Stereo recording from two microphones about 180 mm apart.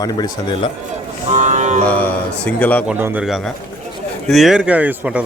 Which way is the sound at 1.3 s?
40° right (ahead or behind).